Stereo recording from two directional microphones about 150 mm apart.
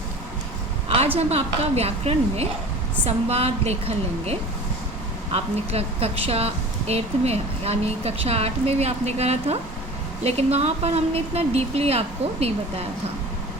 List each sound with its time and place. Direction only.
0.9 s a woman's voice: 40° right (ahead or behind)